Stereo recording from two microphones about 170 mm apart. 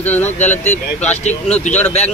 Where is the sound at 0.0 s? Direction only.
10° left (ahead or behind).